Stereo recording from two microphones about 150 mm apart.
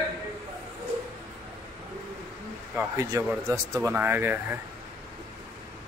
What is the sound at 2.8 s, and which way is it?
A man's voice, 20° right (ahead or behind).